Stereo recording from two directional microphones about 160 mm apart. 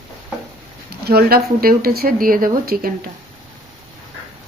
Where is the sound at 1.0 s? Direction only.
75° right (ahead or behind).